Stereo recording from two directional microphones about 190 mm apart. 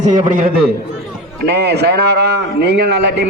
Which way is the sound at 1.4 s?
60° right (ahead or behind).